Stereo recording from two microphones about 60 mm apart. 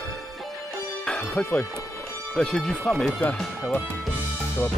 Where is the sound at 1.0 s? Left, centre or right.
Centre.